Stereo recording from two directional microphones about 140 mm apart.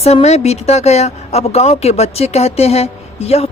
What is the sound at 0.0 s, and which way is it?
A woman's voice, 50° left (ahead or behind).